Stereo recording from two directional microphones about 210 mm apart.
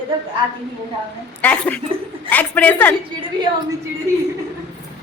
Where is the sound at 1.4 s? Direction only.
5° left (ahead or behind).